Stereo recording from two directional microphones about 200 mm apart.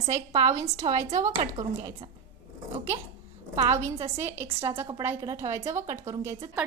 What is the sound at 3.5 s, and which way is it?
A woman's voice, 15° right (ahead or behind).